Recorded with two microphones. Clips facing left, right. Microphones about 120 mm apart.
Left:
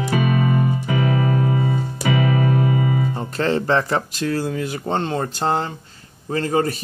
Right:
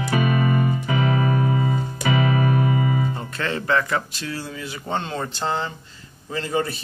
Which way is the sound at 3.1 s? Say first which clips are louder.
Left 6 dB; 35° left (ahead or behind).